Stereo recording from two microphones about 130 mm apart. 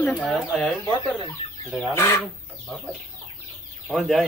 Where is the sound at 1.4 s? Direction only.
45° left (ahead or behind).